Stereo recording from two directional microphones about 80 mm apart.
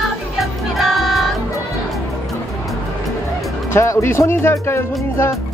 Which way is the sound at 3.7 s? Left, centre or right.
Left.